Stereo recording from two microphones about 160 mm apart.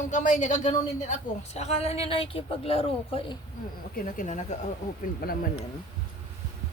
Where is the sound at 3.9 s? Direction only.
55° left (ahead or behind).